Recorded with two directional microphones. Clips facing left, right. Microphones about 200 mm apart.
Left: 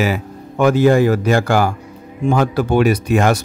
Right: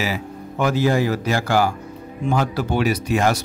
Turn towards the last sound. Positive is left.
turn(degrees=55)  # may be behind; listen again after turning